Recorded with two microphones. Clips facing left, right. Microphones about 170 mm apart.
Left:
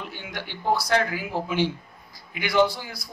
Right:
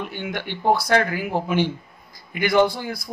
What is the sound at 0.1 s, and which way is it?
A man's voice, 60° right (ahead or behind).